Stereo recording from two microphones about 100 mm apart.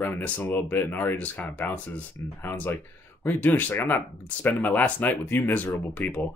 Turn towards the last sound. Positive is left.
turn(degrees=15)  # may be behind; listen again after turning